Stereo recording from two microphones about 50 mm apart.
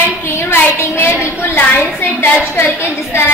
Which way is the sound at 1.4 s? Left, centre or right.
Left.